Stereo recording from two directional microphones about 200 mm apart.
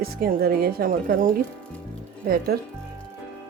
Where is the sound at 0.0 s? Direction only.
50° right (ahead or behind).